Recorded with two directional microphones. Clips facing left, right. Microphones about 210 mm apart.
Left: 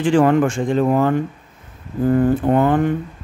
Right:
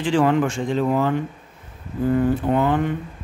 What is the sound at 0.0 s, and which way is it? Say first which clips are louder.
A man's voice: left 4 dB; 50° left (ahead or behind).